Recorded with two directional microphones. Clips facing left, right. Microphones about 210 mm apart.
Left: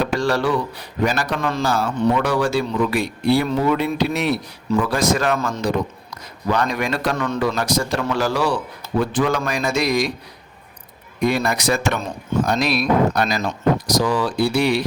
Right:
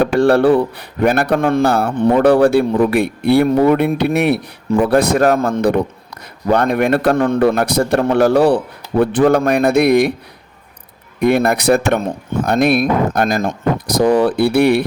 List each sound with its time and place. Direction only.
0.0 s speech: 55° right (ahead or behind)
5.2 s speech: 50° right (ahead or behind)
11.2 s speech: 60° right (ahead or behind)